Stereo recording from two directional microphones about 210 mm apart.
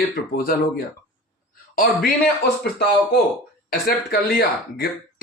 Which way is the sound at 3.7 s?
45° left (ahead or behind).